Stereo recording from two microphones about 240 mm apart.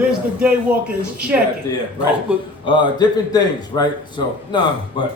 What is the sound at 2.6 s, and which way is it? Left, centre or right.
Speech, centre.